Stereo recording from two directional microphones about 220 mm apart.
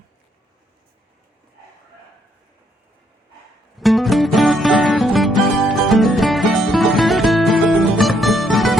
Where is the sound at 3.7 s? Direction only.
Centre (ahead or behind).